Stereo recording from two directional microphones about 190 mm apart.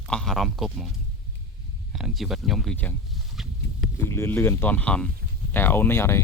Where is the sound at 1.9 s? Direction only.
Centre (ahead or behind).